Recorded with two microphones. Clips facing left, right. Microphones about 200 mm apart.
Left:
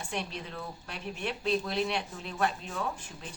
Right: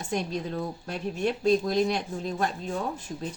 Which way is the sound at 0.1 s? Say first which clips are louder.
Right 9 dB; 40° right (ahead or behind).